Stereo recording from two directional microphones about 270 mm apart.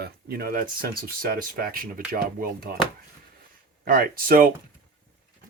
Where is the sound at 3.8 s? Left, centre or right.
Right.